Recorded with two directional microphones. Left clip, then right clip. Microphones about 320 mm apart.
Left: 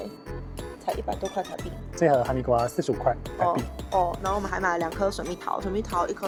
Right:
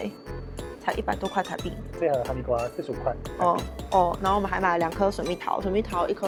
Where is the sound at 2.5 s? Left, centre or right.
Left.